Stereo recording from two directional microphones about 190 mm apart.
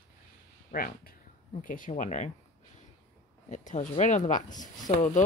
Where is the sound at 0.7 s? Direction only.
50° left (ahead or behind).